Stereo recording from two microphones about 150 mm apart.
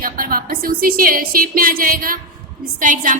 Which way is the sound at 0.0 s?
75° right (ahead or behind).